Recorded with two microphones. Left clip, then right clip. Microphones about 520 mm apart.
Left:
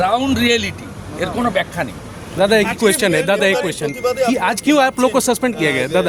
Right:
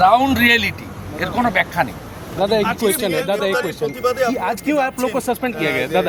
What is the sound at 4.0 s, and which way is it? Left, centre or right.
Speech, right.